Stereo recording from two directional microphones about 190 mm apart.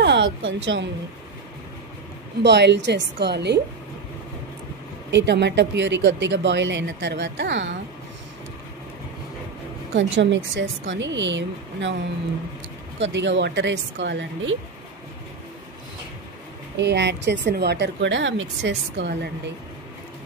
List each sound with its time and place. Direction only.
0.0 s speech: 70° right (ahead or behind)
2.4 s a woman's voice: 65° right (ahead or behind)
5.1 s a woman's voice: 65° right (ahead or behind)
9.9 s a woman's voice: 75° right (ahead or behind)
13.0 s a woman's voice: 70° right (ahead or behind)
16.7 s a woman's voice: 65° right (ahead or behind)